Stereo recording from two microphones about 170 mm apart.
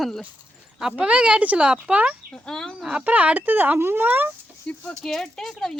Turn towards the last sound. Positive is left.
turn(degrees=0)  # may be behind; listen again after turning